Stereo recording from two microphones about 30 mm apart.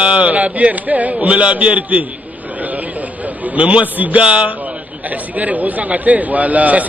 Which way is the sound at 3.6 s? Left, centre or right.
Right.